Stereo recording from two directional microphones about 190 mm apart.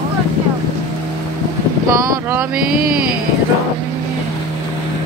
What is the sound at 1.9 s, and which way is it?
Speech, 15° right (ahead or behind).